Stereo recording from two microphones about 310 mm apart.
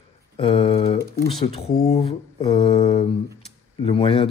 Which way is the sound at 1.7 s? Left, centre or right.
Left.